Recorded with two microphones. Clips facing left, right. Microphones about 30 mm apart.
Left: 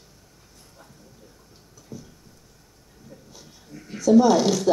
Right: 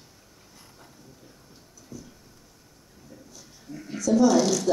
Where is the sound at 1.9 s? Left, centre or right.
Left.